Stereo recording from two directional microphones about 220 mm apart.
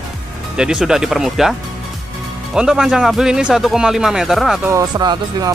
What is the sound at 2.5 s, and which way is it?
Speech, 5° right (ahead or behind).